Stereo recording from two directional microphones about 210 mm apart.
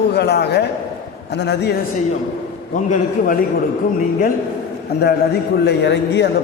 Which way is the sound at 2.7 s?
40° left (ahead or behind).